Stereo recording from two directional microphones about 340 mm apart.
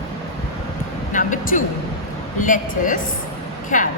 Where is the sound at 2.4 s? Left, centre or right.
Left.